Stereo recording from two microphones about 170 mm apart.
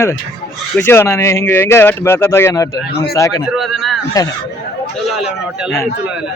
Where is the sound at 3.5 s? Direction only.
Centre (ahead or behind).